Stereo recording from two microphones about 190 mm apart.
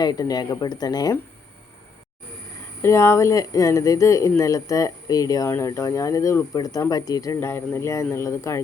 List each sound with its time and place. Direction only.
0.0 s speech: 20° left (ahead or behind)
2.8 s speech: 15° left (ahead or behind)